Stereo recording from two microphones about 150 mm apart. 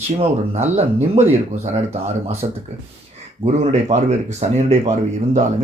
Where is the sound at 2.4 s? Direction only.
40° right (ahead or behind).